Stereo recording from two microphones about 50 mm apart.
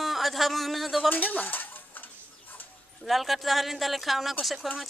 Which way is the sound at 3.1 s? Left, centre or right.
Centre.